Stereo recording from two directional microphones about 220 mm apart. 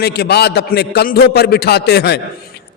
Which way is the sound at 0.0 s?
50° left (ahead or behind).